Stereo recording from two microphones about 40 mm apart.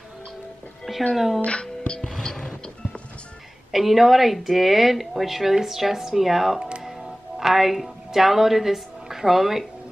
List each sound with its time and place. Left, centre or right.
1.1 s speech: centre
1.4 s music: left
2.0 s music: centre
3.7 s a woman's voice: centre
6.8 s music: centre